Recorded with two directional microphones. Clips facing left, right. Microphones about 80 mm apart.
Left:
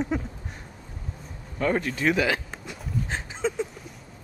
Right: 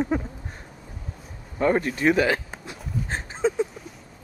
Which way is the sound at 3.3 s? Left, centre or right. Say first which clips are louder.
Right 5 dB; centre.